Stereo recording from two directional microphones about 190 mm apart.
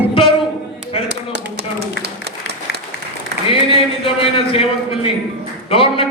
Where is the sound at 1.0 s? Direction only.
60° right (ahead or behind).